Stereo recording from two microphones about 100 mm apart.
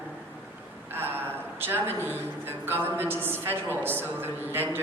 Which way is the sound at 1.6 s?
20° right (ahead or behind).